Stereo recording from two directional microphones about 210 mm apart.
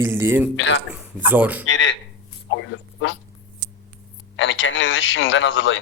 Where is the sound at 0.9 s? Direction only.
10° right (ahead or behind).